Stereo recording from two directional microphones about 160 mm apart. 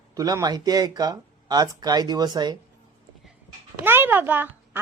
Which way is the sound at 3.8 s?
15° right (ahead or behind).